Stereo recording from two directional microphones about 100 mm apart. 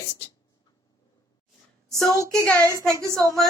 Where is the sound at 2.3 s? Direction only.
5° left (ahead or behind).